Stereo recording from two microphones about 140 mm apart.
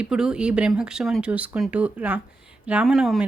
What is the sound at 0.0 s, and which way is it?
Speech, 5° right (ahead or behind).